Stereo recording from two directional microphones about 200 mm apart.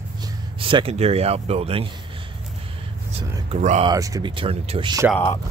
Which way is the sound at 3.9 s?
15° right (ahead or behind).